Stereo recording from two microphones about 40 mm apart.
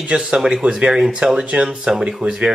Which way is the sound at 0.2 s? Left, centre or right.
Centre.